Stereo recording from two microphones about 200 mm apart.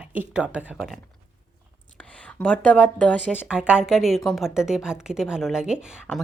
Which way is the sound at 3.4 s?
5° right (ahead or behind).